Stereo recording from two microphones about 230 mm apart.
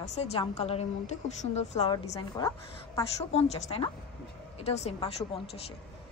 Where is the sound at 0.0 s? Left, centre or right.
Left.